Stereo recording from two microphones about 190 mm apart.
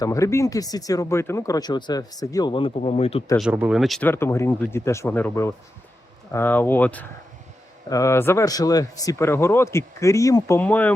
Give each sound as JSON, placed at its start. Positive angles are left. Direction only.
{"t": 0.0, "sound": "speech", "side_deg": 15}
{"t": 3.5, "sound": "speech", "side_deg": -5}
{"t": 4.1, "sound": "speech", "side_deg": 15}